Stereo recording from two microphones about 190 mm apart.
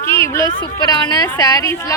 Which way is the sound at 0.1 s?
15° left (ahead or behind).